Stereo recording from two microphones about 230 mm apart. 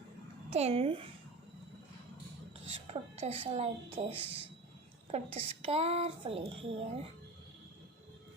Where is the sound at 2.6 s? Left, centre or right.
Right.